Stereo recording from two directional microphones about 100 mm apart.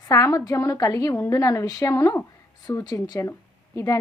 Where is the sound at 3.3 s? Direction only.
25° left (ahead or behind).